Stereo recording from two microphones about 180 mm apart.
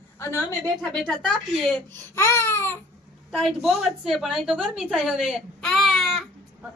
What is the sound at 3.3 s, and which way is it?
A woman's voice, centre (ahead or behind).